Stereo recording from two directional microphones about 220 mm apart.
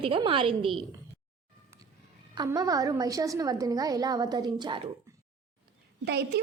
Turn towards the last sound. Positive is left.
turn(degrees=-45)  # may be behind; listen again after turning